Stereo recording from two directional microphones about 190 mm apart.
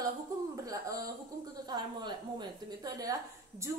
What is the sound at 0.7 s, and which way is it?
A woman's voice, 20° right (ahead or behind).